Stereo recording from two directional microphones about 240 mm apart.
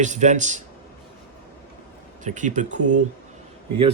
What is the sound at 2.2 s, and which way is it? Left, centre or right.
Speech, right.